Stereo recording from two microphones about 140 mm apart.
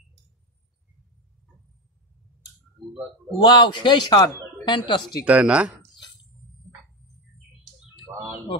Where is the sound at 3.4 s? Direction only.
30° left (ahead or behind).